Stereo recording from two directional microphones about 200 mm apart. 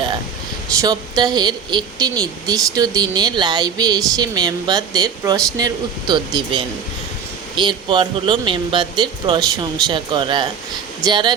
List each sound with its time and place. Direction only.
0.8 s a woman's voice: 20° right (ahead or behind)